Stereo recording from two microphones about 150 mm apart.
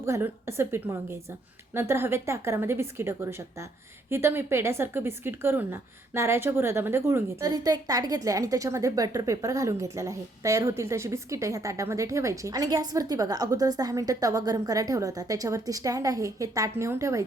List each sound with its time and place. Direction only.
0.0 s a woman's voice: 15° right (ahead or behind)